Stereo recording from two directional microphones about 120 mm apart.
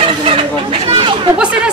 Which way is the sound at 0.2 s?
50° right (ahead or behind).